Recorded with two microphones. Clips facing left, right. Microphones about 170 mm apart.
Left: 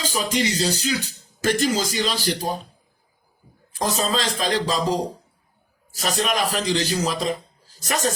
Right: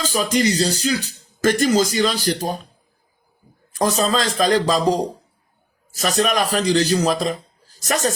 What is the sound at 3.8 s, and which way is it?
Speech, 45° right (ahead or behind).